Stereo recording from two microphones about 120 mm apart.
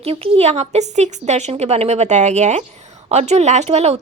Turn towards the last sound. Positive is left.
turn(degrees=-60)  # may be behind; listen again after turning